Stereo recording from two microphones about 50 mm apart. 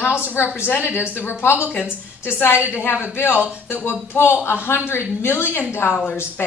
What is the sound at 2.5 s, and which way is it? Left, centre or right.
Speech, right.